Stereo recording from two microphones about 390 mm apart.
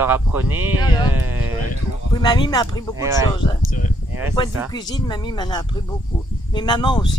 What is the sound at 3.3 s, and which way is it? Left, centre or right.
Speech, centre.